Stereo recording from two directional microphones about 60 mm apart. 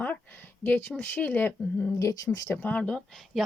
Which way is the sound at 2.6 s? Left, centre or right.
Left.